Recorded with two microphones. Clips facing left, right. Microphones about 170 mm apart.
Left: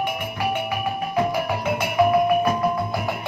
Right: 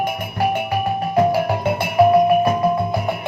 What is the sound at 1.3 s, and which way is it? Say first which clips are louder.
Music: right 5 dB; 40° right (ahead or behind).